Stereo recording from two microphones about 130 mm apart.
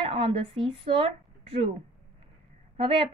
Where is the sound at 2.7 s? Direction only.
45° right (ahead or behind).